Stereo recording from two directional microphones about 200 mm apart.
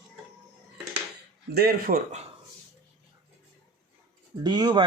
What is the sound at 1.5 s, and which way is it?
Speech, 50° right (ahead or behind).